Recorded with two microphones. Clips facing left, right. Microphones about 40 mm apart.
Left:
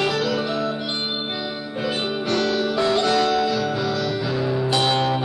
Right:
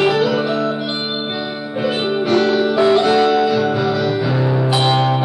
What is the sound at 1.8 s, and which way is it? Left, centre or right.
Music, centre.